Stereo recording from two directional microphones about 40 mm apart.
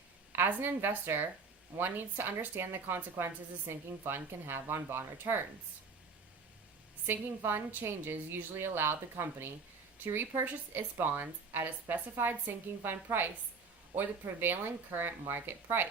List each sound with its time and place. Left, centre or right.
0.3 s a woman's voice: right
7.1 s a woman's voice: right
10.0 s speech: right